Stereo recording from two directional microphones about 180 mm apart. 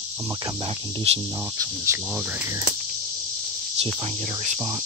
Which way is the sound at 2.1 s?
5° right (ahead or behind).